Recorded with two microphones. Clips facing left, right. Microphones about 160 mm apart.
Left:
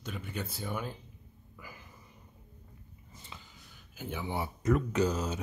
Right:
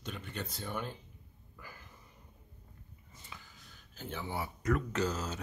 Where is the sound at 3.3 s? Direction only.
25° left (ahead or behind).